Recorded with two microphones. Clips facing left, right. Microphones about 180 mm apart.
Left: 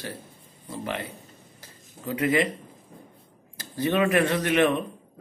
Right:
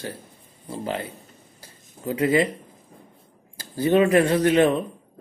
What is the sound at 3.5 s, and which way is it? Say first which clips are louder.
Speech: right 6 dB; 30° right (ahead or behind).